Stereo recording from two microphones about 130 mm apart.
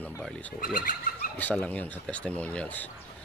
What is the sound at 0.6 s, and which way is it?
Speech, 90° left.